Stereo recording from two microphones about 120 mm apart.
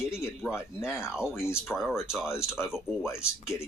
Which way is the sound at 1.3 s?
20° left (ahead or behind).